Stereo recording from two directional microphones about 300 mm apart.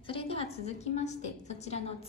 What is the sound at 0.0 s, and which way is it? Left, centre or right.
A woman's voice, centre.